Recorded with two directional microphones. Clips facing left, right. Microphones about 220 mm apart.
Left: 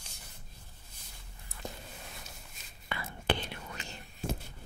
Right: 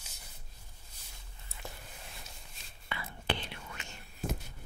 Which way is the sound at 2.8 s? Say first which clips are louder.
Left 3 dB; 45° left (ahead or behind).